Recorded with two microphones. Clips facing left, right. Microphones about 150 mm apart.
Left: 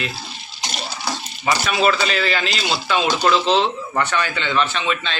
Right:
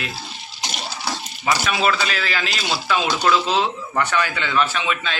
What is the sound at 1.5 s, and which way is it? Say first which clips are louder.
Speech: left 2 dB; centre (ahead or behind).